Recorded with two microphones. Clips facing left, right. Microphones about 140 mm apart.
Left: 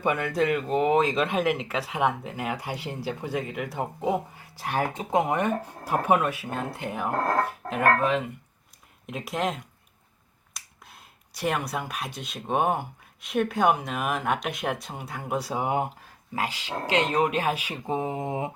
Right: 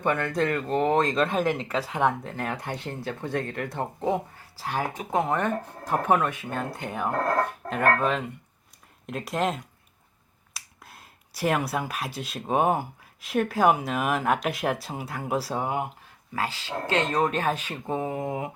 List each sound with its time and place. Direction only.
0.0 s speech: 10° left (ahead or behind)
4.5 s speech: 15° left (ahead or behind); by 15.5 s centre (ahead or behind)
16.3 s speech: 15° left (ahead or behind)